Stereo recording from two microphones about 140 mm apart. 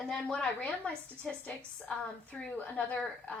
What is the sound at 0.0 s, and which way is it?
A woman's voice, 5° left (ahead or behind).